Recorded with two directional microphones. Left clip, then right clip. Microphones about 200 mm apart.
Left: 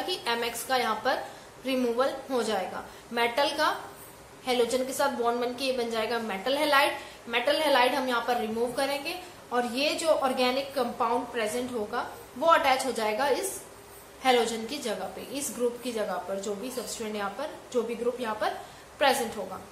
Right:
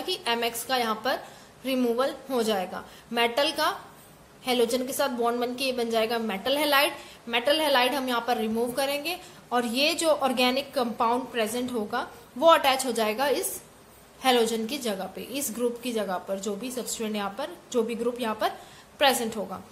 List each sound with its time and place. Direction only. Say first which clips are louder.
0.0 s a woman's voice: right 2 dB; 50° right (ahead or behind)